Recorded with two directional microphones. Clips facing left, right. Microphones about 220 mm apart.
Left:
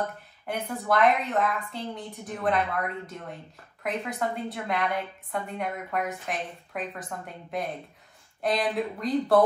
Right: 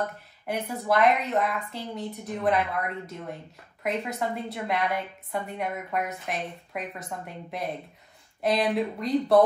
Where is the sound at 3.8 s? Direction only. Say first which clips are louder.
Right 1 dB; centre (ahead or behind).